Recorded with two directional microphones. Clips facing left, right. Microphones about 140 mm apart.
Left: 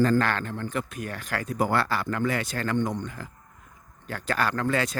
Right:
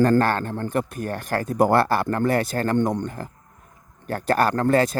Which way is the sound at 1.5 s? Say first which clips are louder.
Right 7 dB; 55° right (ahead or behind).